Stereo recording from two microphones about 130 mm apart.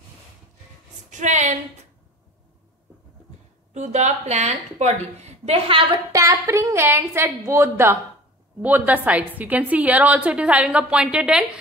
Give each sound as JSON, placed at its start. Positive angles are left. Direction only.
{"t": 1.1, "sound": "a woman's voice", "side_deg": -65}
{"t": 3.7, "sound": "a woman's voice", "side_deg": -60}
{"t": 6.1, "sound": "a woman's voice", "side_deg": -25}